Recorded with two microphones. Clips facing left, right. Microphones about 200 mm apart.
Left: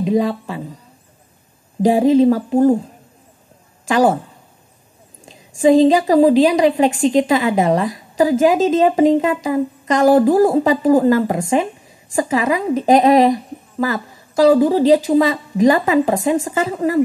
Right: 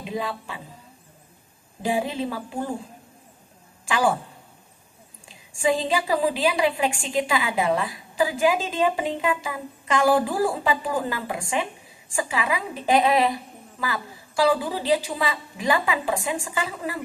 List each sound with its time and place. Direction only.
0.0 s a woman's voice: 40° left (ahead or behind)
1.8 s a woman's voice: 40° left (ahead or behind)
3.8 s a woman's voice: 40° left (ahead or behind)
5.2 s a woman's voice: 40° left (ahead or behind)